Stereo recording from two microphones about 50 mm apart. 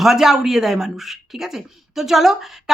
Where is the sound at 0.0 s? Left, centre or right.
Centre.